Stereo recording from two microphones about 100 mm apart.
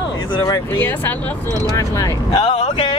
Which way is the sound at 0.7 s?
20° left (ahead or behind).